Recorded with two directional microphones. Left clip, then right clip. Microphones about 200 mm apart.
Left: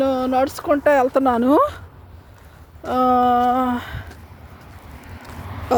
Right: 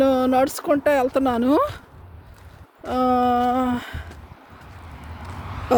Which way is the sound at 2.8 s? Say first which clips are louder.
Left 3 dB; 10° right (ahead or behind).